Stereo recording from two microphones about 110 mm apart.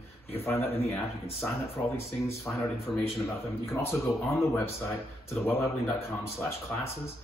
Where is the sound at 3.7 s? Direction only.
25° left (ahead or behind).